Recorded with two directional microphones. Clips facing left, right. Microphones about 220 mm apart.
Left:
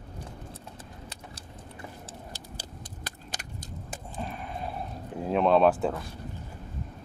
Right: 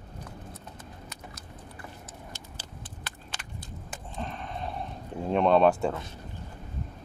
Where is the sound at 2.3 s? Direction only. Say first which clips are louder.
Left 2 dB; 40° left (ahead or behind).